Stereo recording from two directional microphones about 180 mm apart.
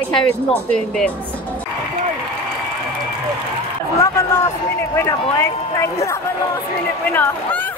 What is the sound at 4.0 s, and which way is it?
A man's voice, 15° left (ahead or behind).